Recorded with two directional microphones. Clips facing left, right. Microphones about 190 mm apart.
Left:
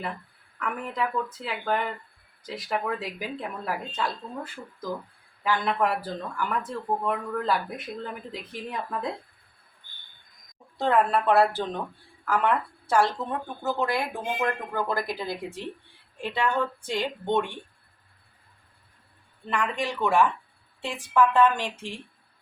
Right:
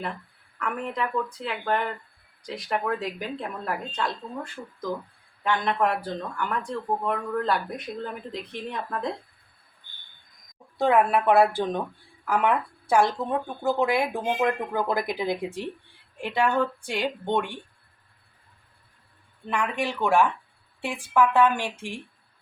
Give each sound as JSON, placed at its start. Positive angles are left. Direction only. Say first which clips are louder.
{"t": 0.6, "sound": "speech", "louder": "right 1 dB", "side_deg": 5}
{"t": 5.4, "sound": "speech", "louder": "right 1 dB", "side_deg": 5}
{"t": 10.8, "sound": "speech", "louder": "right 2 dB", "side_deg": -10}
{"t": 16.8, "sound": "speech", "louder": "right 1 dB", "side_deg": -15}
{"t": 19.5, "sound": "speech", "louder": "right 1 dB", "side_deg": -15}